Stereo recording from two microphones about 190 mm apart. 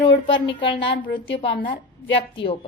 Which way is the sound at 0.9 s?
50° left (ahead or behind).